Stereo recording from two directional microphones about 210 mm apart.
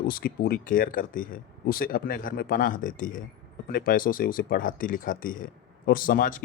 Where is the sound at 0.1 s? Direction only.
45° left (ahead or behind).